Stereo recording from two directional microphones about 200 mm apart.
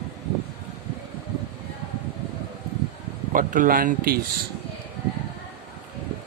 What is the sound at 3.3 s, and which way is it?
Speech, 40° right (ahead or behind).